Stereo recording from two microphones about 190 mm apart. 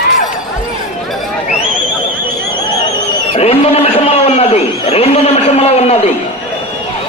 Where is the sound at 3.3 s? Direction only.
30° left (ahead or behind).